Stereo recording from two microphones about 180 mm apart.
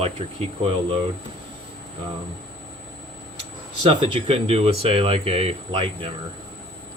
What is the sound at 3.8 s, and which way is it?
Speech, 35° right (ahead or behind).